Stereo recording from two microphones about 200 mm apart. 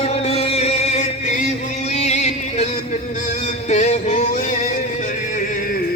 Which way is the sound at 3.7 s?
35° left (ahead or behind).